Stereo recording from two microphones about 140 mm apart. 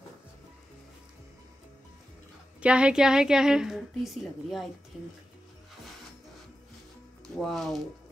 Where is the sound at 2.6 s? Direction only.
5° right (ahead or behind).